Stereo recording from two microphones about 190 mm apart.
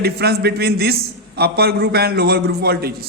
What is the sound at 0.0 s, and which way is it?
A man's voice, 55° right (ahead or behind).